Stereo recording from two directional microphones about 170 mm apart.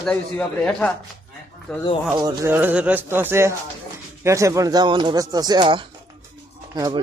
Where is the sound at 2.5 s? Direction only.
10° right (ahead or behind).